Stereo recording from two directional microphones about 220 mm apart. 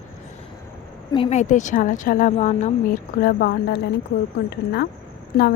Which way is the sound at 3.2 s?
45° left (ahead or behind).